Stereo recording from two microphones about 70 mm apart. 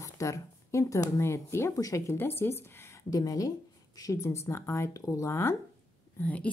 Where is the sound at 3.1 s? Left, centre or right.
Left.